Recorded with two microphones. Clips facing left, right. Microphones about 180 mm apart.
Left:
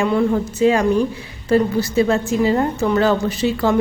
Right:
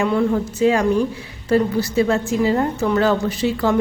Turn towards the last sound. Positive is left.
turn(degrees=25)  # may be behind; listen again after turning